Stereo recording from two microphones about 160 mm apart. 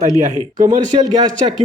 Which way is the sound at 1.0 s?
25° right (ahead or behind).